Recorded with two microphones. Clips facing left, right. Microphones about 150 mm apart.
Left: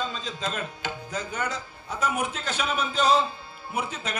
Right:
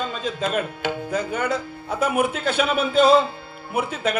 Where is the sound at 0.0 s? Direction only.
55° right (ahead or behind).